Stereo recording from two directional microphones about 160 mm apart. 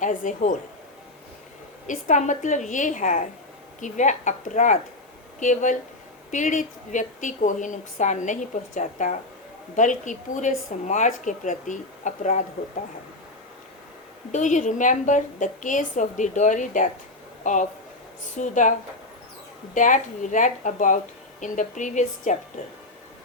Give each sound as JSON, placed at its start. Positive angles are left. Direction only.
{"t": 0.0, "sound": "speech", "side_deg": 55}
{"t": 1.9, "sound": "a woman's voice", "side_deg": 50}
{"t": 14.3, "sound": "a woman's voice", "side_deg": 50}
{"t": 19.7, "sound": "a woman's voice", "side_deg": 55}